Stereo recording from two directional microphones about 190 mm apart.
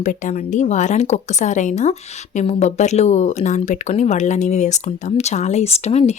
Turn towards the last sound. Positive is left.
turn(degrees=35)  # may be behind; listen again after turning